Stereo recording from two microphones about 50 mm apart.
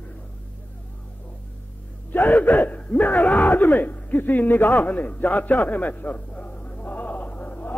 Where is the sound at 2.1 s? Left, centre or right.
Left.